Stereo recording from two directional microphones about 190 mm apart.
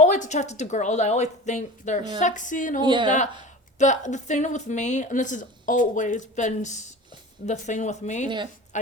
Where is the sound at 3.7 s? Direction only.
40° left (ahead or behind).